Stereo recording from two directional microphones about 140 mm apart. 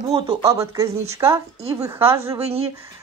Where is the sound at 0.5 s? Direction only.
20° right (ahead or behind).